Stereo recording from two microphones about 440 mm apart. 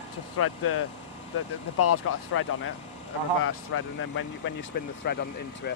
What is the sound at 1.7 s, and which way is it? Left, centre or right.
Speech, left.